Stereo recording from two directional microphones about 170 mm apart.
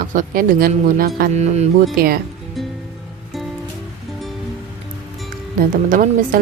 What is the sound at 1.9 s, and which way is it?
Speech, 60° right (ahead or behind).